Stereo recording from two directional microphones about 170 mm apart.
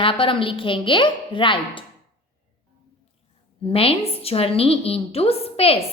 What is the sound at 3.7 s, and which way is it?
A woman's voice, 35° left (ahead or behind).